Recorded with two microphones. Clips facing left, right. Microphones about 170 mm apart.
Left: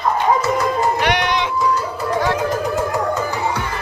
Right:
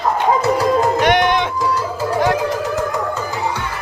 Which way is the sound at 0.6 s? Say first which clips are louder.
Right 3 dB; 45° right (ahead or behind).